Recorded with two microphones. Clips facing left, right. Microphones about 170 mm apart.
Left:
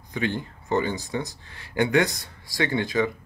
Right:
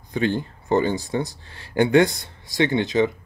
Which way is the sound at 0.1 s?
30° right (ahead or behind).